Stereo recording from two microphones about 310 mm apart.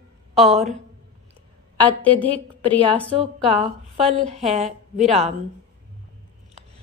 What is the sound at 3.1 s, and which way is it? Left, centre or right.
A woman's voice, centre.